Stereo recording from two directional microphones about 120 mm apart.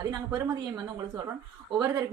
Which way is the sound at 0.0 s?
35° right (ahead or behind).